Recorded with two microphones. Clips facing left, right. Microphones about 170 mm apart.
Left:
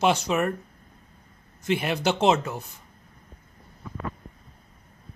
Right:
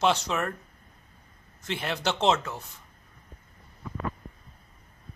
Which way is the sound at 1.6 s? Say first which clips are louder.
Left 6 dB; 10° left (ahead or behind).